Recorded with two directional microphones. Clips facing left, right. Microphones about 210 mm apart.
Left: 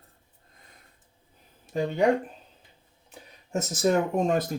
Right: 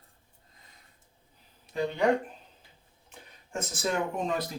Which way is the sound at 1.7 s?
45° left (ahead or behind).